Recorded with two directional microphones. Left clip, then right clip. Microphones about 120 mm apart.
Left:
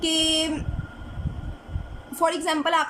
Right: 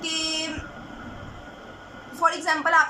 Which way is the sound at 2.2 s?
35° left (ahead or behind).